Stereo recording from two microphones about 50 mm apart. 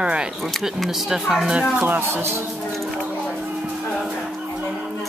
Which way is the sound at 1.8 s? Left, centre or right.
Right.